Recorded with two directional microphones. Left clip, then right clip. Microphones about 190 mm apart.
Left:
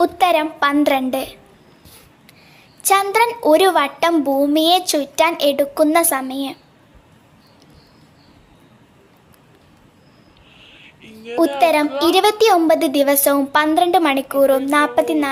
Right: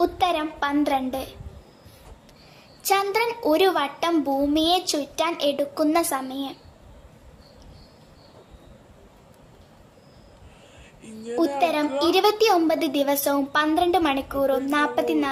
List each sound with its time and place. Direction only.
0.0 s a child's voice: 10° left (ahead or behind)
2.8 s a child's voice: 10° left (ahead or behind)
11.0 s a sound: 75° right (ahead or behind)
11.6 s a child's voice: 10° left (ahead or behind)